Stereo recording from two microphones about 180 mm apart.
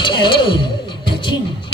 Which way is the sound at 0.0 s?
25° left (ahead or behind).